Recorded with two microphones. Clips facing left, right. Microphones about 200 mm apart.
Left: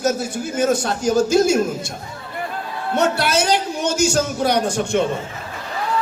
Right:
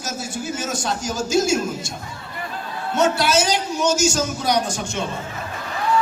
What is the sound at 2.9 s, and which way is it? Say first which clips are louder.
A man's voice: even; 60° left (ahead or behind).